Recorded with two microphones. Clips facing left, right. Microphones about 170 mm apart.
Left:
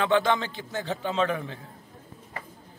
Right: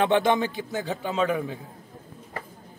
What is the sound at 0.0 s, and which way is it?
A man's voice, 20° right (ahead or behind).